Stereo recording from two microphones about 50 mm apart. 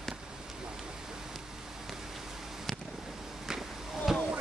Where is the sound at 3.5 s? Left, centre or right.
Centre.